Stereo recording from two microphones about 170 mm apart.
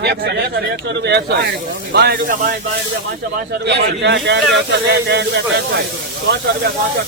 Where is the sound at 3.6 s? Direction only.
90° right.